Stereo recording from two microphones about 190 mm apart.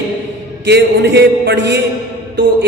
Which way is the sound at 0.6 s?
60° right (ahead or behind).